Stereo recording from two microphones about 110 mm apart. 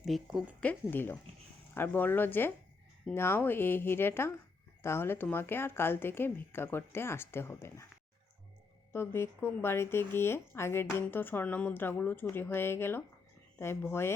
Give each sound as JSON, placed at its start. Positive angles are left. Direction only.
{"t": 0.0, "sound": "speech", "side_deg": 0}
{"t": 0.6, "sound": "speech", "side_deg": 15}
{"t": 8.9, "sound": "speech", "side_deg": 20}